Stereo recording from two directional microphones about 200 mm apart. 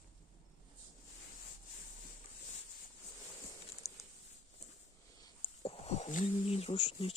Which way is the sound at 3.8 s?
15° left (ahead or behind).